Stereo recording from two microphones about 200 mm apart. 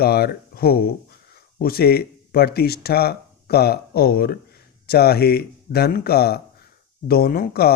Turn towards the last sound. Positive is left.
turn(degrees=50)  # may be behind; listen again after turning